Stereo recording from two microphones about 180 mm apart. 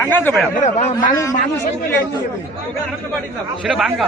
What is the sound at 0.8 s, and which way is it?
Speech, 40° left (ahead or behind).